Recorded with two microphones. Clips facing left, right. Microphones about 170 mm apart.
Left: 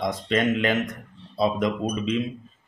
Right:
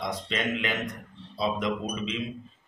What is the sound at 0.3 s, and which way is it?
Speech, 45° left (ahead or behind).